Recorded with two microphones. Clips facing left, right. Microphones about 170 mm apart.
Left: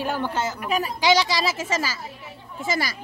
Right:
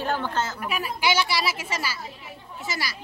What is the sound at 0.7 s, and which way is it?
Speech, 35° left (ahead or behind).